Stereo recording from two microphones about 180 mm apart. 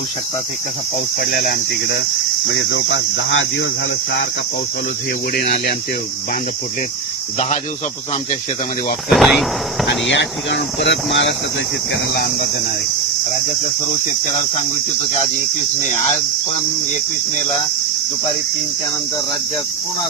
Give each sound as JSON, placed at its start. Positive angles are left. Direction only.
{"t": 1.2, "sound": "cricket", "side_deg": 60}
{"t": 2.5, "sound": "speech", "side_deg": 90}
{"t": 5.3, "sound": "cricket", "side_deg": 60}
{"t": 9.1, "sound": "speech", "side_deg": 0}
{"t": 9.8, "sound": "speech", "side_deg": 85}
{"t": 11.9, "sound": "speech", "side_deg": 65}